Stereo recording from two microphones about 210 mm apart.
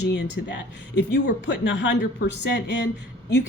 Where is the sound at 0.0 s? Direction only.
55° left (ahead or behind).